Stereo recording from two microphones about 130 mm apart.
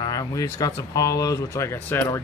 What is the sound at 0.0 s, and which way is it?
Speech, 30° left (ahead or behind).